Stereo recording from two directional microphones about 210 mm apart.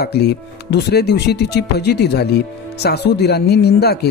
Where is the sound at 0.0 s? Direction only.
50° left (ahead or behind).